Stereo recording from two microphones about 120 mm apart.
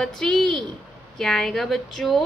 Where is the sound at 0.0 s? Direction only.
5° left (ahead or behind).